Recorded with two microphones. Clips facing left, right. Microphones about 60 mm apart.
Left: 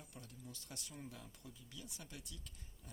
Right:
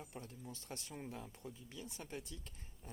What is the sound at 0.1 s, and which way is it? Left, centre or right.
Speech, right.